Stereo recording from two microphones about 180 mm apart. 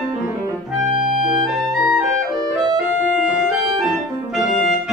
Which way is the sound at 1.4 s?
5° right (ahead or behind).